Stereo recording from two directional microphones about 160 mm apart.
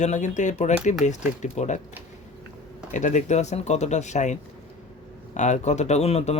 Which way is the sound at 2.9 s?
50° left (ahead or behind).